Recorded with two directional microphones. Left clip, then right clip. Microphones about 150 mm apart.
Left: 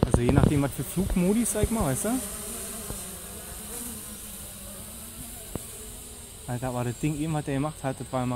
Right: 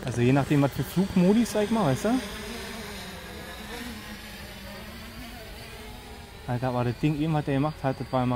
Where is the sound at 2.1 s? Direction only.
85° left.